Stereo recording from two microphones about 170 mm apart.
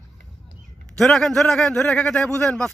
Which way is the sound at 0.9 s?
5° left (ahead or behind).